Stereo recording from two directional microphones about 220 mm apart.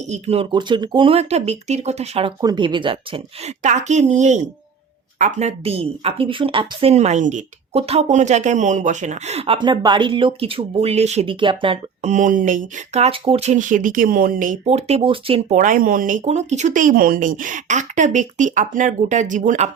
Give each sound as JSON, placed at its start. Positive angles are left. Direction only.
{"t": 0.1, "sound": "speech", "side_deg": -25}